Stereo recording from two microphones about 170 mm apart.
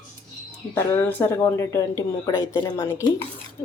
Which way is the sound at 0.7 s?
10° left (ahead or behind).